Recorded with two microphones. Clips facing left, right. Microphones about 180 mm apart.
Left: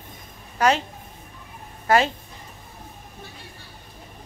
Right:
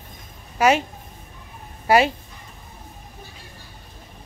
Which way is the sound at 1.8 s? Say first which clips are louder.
Right 2 dB; 10° right (ahead or behind).